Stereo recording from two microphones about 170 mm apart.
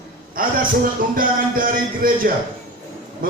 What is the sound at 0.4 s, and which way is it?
A man's voice, 55° right (ahead or behind).